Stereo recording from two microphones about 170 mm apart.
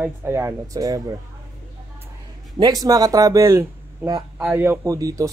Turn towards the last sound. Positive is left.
turn(degrees=-20)  # may be behind; listen again after turning